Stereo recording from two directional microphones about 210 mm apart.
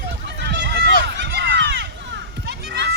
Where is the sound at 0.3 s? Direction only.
55° right (ahead or behind).